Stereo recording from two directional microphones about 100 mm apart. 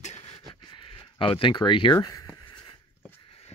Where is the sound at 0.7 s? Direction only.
55° left (ahead or behind); by 2.3 s 40° left (ahead or behind).